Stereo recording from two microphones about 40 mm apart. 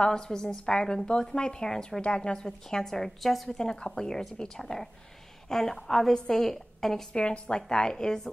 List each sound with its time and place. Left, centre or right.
0.0 s a woman's voice: centre
3.4 s a woman's voice: centre
7.2 s a woman's voice: left